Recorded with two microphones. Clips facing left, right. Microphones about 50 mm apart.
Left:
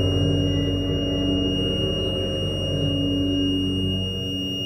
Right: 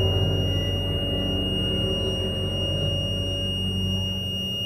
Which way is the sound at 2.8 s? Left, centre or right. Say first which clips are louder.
Left 6 dB; centre.